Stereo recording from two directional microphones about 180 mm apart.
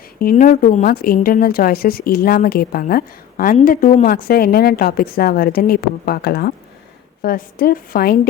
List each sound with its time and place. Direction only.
0.2 s a woman's voice: 50° left (ahead or behind)